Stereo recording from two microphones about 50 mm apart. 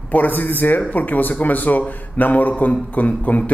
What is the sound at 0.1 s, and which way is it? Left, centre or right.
Speech, left.